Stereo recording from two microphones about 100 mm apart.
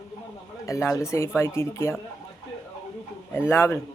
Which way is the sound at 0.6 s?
30° left (ahead or behind).